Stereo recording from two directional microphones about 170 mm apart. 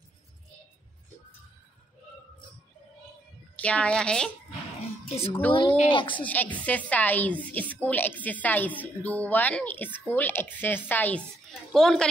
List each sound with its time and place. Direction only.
3.6 s a woman's voice: 5° left (ahead or behind)
5.5 s a woman's voice: 30° left (ahead or behind)
6.1 s a woman's voice: 10° left (ahead or behind)